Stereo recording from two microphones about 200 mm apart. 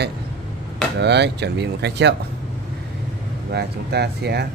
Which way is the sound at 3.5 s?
55° right (ahead or behind).